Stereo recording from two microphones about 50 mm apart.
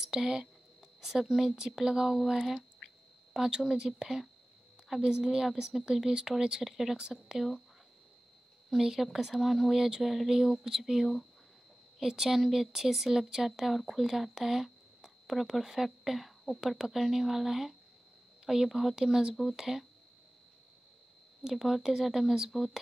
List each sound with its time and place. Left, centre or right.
0.0 s speech: centre
4.8 s a sound: centre
5.1 s speech: centre
7.0 s speech: centre
7.3 s speech: centre
8.6 s speech: centre
21.5 s speech: centre